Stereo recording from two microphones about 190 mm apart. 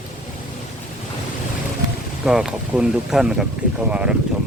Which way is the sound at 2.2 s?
5° right (ahead or behind).